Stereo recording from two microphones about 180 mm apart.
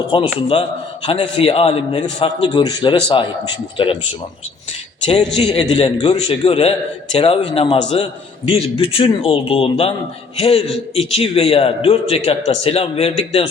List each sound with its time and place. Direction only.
0.3 s a man's voice: 30° left (ahead or behind)
5.0 s a man's voice: 30° left (ahead or behind)